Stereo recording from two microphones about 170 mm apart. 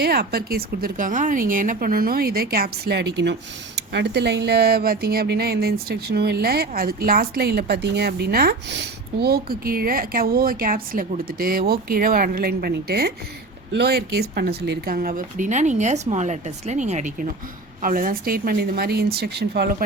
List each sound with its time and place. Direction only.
0.0 s speech: 70° right (ahead or behind)